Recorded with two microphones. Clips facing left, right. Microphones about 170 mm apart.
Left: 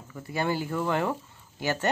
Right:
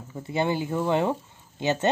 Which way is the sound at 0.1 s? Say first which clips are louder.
Right 3 dB; 25° right (ahead or behind).